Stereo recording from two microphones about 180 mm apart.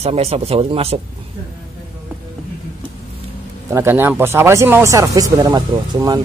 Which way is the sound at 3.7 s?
15° right (ahead or behind).